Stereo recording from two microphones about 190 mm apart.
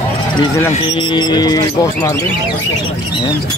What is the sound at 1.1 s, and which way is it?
Speech, 20° left (ahead or behind).